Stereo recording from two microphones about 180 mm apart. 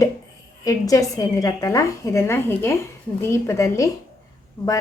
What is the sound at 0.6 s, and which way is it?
A woman's voice, 20° left (ahead or behind).